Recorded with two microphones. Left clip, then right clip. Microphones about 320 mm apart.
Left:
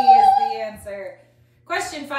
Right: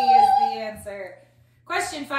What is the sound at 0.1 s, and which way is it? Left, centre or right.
Child singing, centre.